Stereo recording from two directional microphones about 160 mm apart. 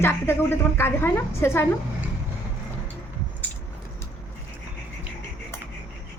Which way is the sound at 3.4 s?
10° left (ahead or behind).